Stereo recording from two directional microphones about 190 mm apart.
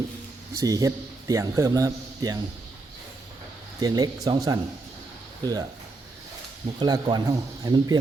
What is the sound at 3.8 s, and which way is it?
Speech, 20° right (ahead or behind).